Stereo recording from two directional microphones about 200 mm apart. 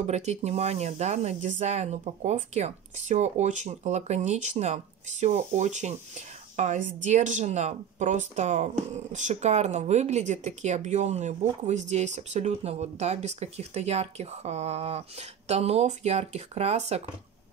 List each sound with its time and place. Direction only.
0.0 s speech: 35° right (ahead or behind)